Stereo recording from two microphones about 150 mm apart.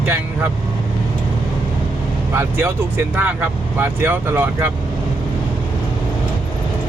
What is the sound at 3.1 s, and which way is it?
Speech, 15° right (ahead or behind).